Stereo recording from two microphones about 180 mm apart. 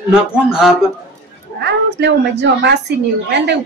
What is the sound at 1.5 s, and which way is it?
A man's voice, 70° right (ahead or behind).